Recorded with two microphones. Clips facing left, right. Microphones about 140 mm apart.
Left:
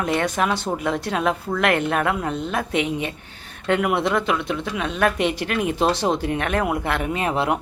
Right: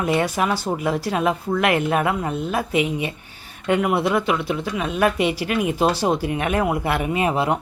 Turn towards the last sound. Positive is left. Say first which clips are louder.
# right 2 dB
turn(degrees=0)  # may be behind; listen again after turning